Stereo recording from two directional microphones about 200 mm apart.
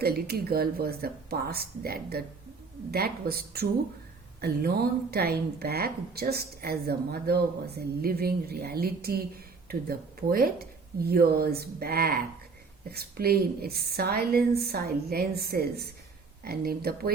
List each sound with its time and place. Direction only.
0.0 s a woman's voice: 50° right (ahead or behind)